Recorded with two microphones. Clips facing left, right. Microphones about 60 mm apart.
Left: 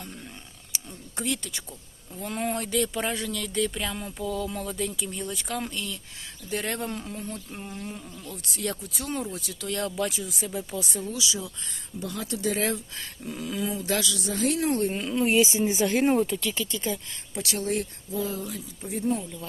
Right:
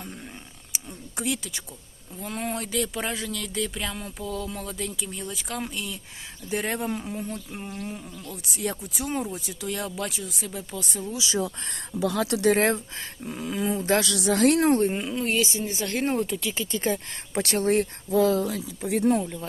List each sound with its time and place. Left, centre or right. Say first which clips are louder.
1.1 s speech: right 1 dB; centre
9.6 s speech: left 2 dB; centre
11.3 s speech: right 8 dB; right
13.2 s speech: right 3 dB; right
14.0 s speech: right 6 dB; right
14.7 s speech: right 4 dB; right
15.1 s speech: left 3 dB; centre
15.4 s speech: left 4 dB; left
15.9 s speech: even; centre
16.7 s speech: right 4 dB; right
17.3 s speech: right 6 dB; right
18.8 s speech: right 6 dB; right